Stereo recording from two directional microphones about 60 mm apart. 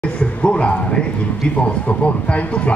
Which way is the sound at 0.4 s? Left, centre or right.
Centre.